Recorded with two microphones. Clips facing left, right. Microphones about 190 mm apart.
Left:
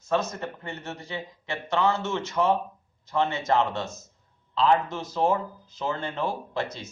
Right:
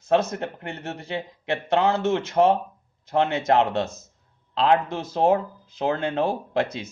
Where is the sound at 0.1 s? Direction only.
65° right (ahead or behind).